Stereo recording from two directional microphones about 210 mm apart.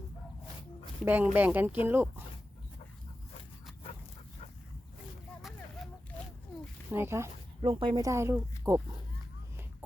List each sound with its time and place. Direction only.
1.0 s speech: 10° right (ahead or behind)
5.4 s a sound: centre (ahead or behind)
6.9 s speech: 10° right (ahead or behind)
7.6 s speech: 25° right (ahead or behind)